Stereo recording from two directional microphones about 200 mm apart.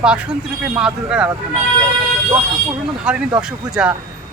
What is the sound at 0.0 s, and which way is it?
Speech, 5° right (ahead or behind).